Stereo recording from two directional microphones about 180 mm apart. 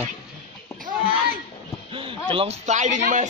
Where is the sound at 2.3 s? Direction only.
35° right (ahead or behind).